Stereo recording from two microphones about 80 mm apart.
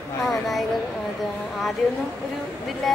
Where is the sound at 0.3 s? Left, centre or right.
Centre.